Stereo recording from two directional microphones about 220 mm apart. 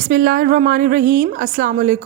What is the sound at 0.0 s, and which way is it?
A man's voice, 40° right (ahead or behind).